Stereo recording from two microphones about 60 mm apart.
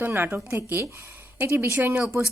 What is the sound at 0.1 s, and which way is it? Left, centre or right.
Speech, right.